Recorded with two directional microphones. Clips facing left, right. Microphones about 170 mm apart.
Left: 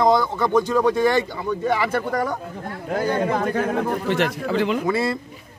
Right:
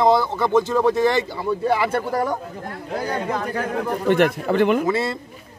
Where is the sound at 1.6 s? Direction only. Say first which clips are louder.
Right 1 dB; 30° right (ahead or behind).